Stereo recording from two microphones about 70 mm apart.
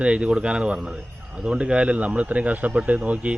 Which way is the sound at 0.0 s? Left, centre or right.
Centre.